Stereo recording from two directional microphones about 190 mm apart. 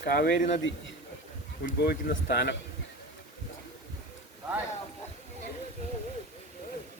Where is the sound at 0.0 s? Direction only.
55° left (ahead or behind).